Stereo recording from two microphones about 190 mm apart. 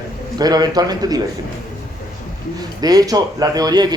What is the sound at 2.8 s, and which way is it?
Speech, 20° right (ahead or behind).